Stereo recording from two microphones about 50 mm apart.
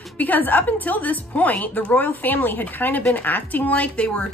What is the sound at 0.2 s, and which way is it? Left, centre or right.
A woman's voice, left.